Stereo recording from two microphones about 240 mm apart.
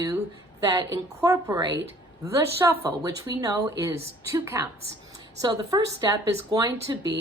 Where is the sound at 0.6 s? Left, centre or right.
Centre.